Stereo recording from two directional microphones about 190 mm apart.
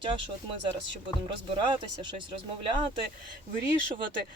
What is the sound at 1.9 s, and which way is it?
Speech, 25° right (ahead or behind).